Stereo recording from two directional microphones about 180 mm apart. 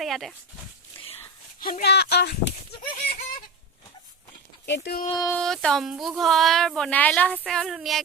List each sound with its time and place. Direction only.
0.0 s dog: centre (ahead or behind)
1.5 s speech: 50° left (ahead or behind)
4.6 s speech: 75° left (ahead or behind)
5.0 s speech: 20° left (ahead or behind)
5.3 s speech: 5° left (ahead or behind)